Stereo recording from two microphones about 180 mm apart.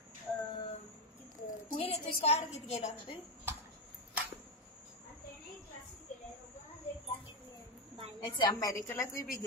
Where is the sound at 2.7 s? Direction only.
35° left (ahead or behind).